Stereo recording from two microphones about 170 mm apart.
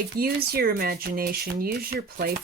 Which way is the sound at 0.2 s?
65° right (ahead or behind).